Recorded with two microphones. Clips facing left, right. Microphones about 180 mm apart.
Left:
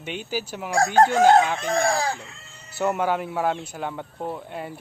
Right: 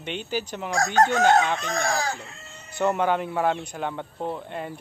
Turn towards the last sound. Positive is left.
turn(degrees=5)  # may be behind; listen again after turning